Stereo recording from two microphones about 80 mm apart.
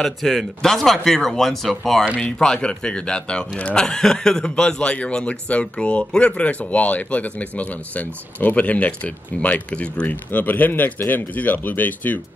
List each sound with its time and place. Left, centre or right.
0.0 s speech: centre; by 12.2 s left